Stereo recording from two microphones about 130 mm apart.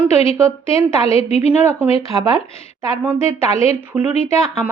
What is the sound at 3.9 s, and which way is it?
Speech, 5° right (ahead or behind).